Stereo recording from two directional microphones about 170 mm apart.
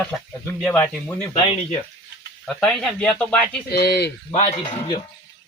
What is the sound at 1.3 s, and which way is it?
Speech, 30° left (ahead or behind).